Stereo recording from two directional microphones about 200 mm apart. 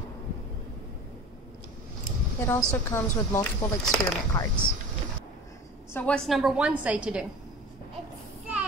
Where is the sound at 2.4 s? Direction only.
15° left (ahead or behind).